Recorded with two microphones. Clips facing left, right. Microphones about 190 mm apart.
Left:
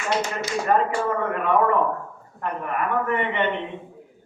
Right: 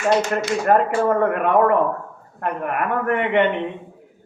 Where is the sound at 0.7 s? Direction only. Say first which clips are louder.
Right 5 dB; 50° right (ahead or behind).